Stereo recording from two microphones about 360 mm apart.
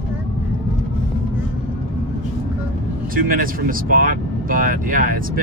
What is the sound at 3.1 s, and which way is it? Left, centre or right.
Speech, right.